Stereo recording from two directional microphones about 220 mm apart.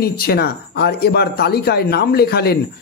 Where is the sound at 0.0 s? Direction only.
45° left (ahead or behind).